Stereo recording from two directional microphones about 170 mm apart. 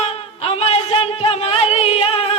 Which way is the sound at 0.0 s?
35° left (ahead or behind).